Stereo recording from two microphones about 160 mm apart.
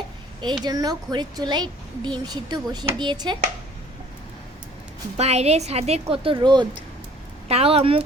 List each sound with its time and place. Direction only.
0.6 s a child's voice: 25° right (ahead or behind)
5.1 s a woman's voice: 40° right (ahead or behind)
7.4 s a woman's voice: 40° right (ahead or behind)